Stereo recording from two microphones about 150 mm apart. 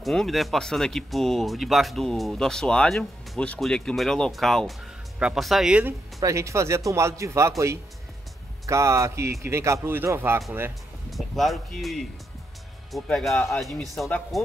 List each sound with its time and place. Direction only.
0.0 s speech: centre (ahead or behind)
6.1 s a man's voice: 20° right (ahead or behind)
11.1 s speech: centre (ahead or behind)